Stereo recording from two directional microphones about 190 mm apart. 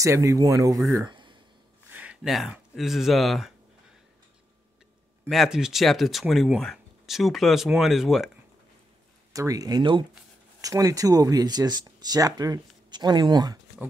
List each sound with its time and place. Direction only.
0.0 s speech: 15° right (ahead or behind)
0.8 s a sound: 20° right (ahead or behind)
1.9 s speech: 5° right (ahead or behind)
5.3 s speech: centre (ahead or behind)
9.3 s speech: 15° right (ahead or behind)